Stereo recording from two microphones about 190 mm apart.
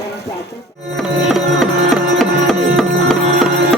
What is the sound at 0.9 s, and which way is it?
Music, centre (ahead or behind).